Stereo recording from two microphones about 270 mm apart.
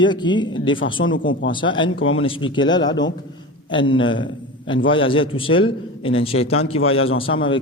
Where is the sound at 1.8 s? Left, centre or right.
Left.